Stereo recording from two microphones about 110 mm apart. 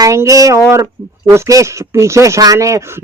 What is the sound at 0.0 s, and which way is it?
Speech, 30° right (ahead or behind).